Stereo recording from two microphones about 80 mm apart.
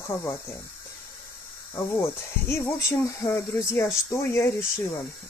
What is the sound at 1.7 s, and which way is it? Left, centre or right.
Speech, left.